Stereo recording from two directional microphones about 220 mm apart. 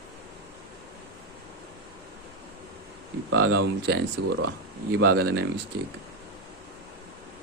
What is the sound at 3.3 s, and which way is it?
Speech, 50° right (ahead or behind).